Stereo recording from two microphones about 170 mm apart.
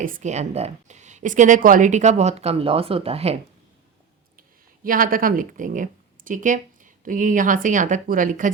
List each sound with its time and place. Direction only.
0.0 s a woman's voice: 50° right (ahead or behind)
4.4 s speech: 55° right (ahead or behind)